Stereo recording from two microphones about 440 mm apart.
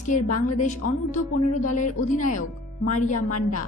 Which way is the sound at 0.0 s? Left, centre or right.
Centre.